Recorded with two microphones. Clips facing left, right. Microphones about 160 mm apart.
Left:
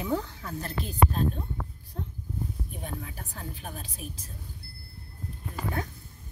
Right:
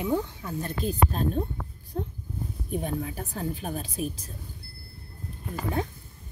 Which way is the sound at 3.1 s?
20° right (ahead or behind).